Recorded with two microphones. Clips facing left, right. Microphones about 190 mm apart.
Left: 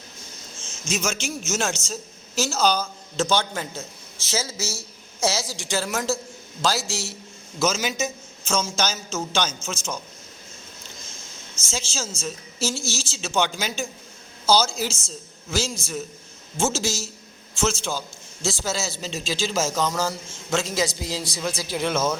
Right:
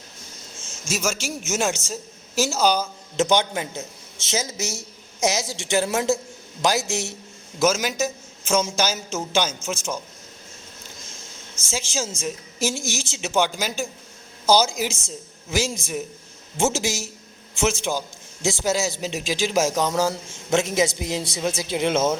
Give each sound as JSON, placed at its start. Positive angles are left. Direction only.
{"t": 0.9, "sound": "a man's voice", "side_deg": -5}
{"t": 7.6, "sound": "a man's voice", "side_deg": -10}
{"t": 11.7, "sound": "a man's voice", "side_deg": -15}